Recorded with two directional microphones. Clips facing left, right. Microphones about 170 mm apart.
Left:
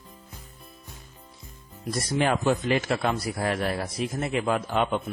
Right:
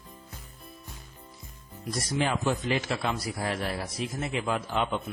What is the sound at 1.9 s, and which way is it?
Speech, 55° left (ahead or behind).